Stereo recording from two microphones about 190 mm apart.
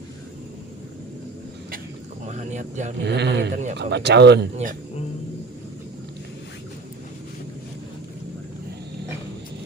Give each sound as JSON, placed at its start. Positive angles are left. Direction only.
{"t": 2.2, "sound": "a sound", "side_deg": -35}
{"t": 3.0, "sound": "speech", "side_deg": -65}
{"t": 3.5, "sound": "speech", "side_deg": -40}
{"t": 3.8, "sound": "speech", "side_deg": -60}